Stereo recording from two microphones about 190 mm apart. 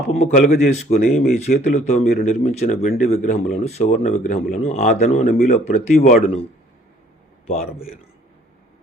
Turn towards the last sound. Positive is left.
turn(degrees=35)  # may be behind; listen again after turning